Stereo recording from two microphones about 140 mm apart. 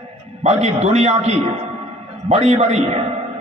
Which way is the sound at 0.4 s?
50° right (ahead or behind).